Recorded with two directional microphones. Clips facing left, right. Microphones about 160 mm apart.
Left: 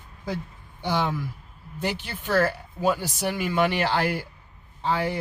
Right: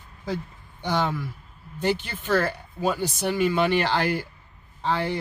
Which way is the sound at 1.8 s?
5° left (ahead or behind).